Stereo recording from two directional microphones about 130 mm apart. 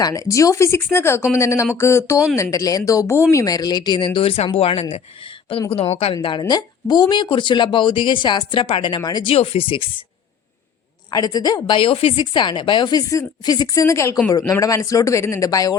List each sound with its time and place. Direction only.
0.0 s speech: 25° left (ahead or behind); by 6.1 s 50° left (ahead or behind)
6.5 s a woman's voice: 30° left (ahead or behind)
9.3 s speech: 50° left (ahead or behind)
11.1 s a woman's voice: 30° left (ahead or behind)
11.6 s a woman's voice: 45° left (ahead or behind); by 15.7 s 25° left (ahead or behind)